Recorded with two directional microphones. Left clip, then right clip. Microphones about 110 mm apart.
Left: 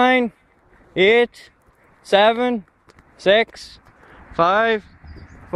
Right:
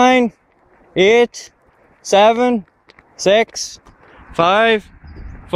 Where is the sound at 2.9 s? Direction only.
20° left (ahead or behind).